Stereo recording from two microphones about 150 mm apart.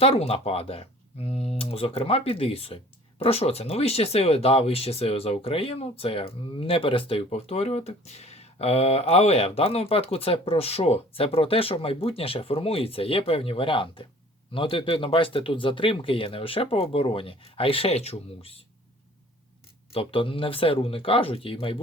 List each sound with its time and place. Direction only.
0.0 s speech: 40° left (ahead or behind)
19.9 s speech: 40° left (ahead or behind)